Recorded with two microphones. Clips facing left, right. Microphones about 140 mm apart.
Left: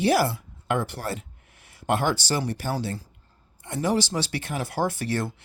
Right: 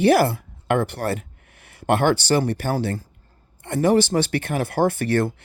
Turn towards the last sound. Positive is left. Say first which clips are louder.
# right 7 dB
turn(degrees=-55)  # may be behind; listen again after turning